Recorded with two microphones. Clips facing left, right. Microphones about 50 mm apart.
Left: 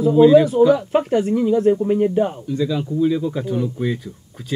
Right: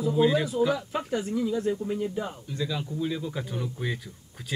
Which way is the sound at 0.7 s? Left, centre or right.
Left.